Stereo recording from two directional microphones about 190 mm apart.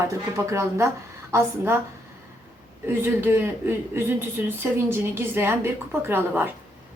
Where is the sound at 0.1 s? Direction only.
15° right (ahead or behind).